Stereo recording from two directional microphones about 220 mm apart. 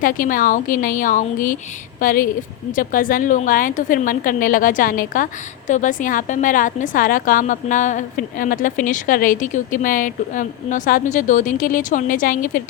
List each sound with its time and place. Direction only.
0.0 s a woman's voice: 40° left (ahead or behind)